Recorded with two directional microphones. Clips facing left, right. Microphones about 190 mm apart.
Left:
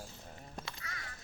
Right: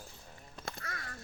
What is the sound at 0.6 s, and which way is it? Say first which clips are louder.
Crow: right 7 dB; 50° right (ahead or behind).